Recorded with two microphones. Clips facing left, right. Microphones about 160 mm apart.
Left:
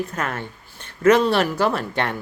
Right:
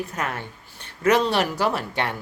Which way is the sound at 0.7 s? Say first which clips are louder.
Left 4 dB; 10° right (ahead or behind).